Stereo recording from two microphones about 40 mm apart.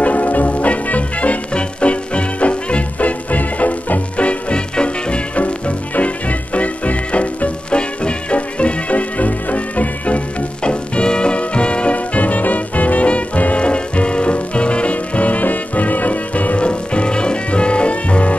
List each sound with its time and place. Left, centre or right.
0.0 s music: left